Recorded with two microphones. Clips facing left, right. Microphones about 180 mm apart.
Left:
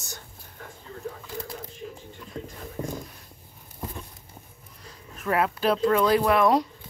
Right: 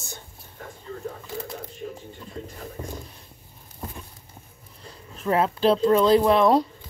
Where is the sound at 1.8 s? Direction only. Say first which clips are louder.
Right 5 dB; 40° right (ahead or behind).